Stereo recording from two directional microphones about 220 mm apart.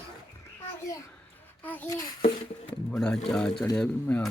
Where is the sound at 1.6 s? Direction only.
10° left (ahead or behind).